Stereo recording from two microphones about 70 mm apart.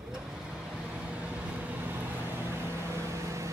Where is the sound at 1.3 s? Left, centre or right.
Right.